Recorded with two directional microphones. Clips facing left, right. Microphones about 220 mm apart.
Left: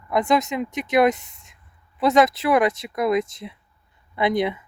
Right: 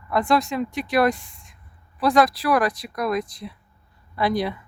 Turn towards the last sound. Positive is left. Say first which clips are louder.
# left 2 dB
turn(degrees=20)  # may be behind; listen again after turning